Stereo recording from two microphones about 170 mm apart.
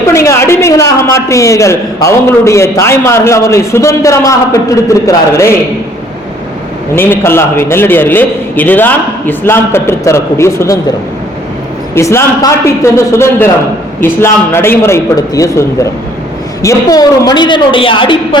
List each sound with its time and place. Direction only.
0.1 s a sound: 15° left (ahead or behind)
1.1 s a man's voice: 20° left (ahead or behind)
6.9 s a man's voice: 15° left (ahead or behind)
11.9 s a man's voice: 15° left (ahead or behind)